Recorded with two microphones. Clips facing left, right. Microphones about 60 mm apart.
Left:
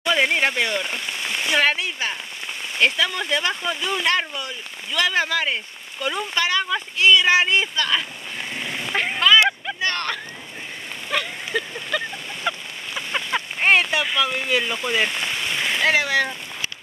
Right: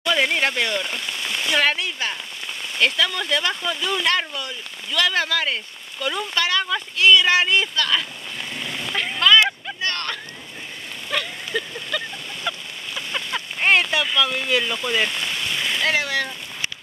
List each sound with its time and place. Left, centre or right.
0.0 s speech: centre
8.9 s speech: left
11.1 s a sound: centre
14.0 s speech: centre